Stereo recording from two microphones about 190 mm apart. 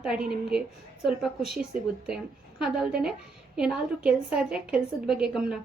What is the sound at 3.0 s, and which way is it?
A woman's voice, 5° right (ahead or behind).